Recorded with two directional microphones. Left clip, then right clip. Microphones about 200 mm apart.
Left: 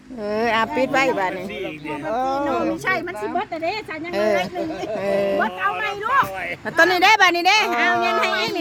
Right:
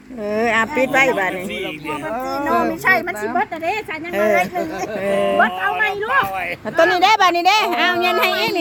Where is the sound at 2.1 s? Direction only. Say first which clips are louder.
Left 3 dB; 50° left (ahead or behind).